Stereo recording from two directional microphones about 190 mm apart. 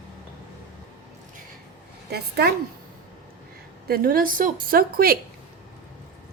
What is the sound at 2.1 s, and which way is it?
Speech, 55° right (ahead or behind).